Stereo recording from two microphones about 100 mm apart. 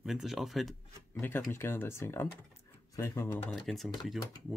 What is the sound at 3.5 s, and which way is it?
Speech, centre (ahead or behind).